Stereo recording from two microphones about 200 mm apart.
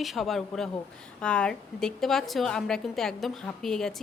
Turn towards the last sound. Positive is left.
turn(degrees=0)  # may be behind; listen again after turning